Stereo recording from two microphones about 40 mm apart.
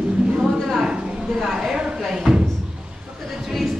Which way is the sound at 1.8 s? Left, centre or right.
Centre.